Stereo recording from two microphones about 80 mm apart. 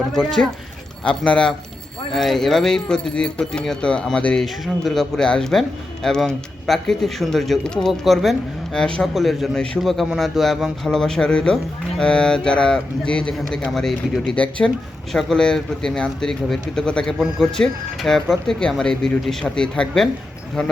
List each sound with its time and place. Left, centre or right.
0.1 s speech: centre
4.4 s speech: centre
9.1 s speech: centre